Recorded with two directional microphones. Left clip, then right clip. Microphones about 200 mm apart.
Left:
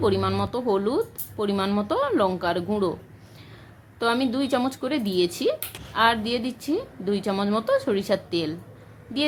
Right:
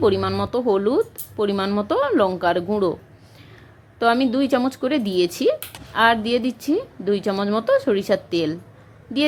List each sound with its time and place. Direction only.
0.0 s speech: 20° right (ahead or behind)
4.0 s speech: 15° right (ahead or behind)